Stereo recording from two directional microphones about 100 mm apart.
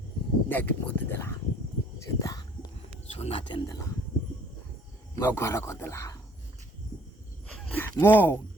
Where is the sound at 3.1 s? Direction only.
90° left.